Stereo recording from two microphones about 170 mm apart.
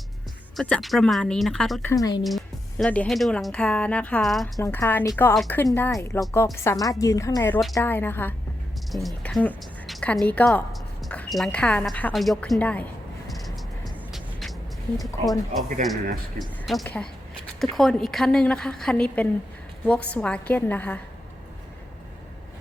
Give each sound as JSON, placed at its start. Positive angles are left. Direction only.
{"t": 0.5, "sound": "speech", "side_deg": 5}
{"t": 1.9, "sound": "speech", "side_deg": 20}
{"t": 2.2, "sound": "speech", "side_deg": 0}
{"t": 4.6, "sound": "a woman's voice", "side_deg": 15}
{"t": 8.9, "sound": "a woman's voice", "side_deg": 0}
{"t": 13.2, "sound": "music", "side_deg": 0}
{"t": 15.3, "sound": "a woman's voice", "side_deg": 0}